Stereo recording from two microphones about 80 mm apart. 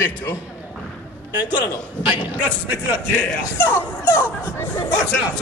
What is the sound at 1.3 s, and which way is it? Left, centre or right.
Speech, right.